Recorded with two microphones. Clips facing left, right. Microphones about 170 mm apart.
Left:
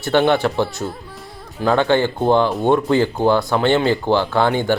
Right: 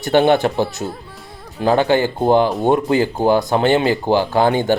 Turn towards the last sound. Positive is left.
turn(degrees=-15)  # may be behind; listen again after turning